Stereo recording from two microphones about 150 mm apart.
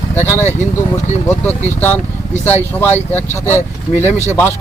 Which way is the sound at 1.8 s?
10° left (ahead or behind).